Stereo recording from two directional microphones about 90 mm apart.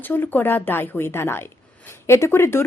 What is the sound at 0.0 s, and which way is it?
Speech, 20° left (ahead or behind).